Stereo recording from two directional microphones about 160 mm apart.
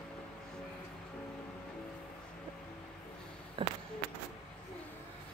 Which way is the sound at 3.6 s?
35° right (ahead or behind).